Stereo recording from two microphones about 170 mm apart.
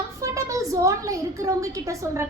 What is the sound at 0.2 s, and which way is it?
A woman's voice, 20° right (ahead or behind).